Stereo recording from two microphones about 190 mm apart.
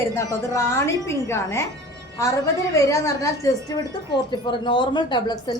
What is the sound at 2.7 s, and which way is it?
A woman's voice, 15° left (ahead or behind).